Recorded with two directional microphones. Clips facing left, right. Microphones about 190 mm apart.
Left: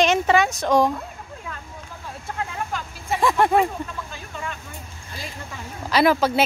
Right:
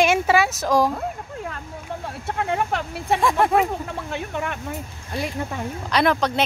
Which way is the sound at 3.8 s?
65° right (ahead or behind).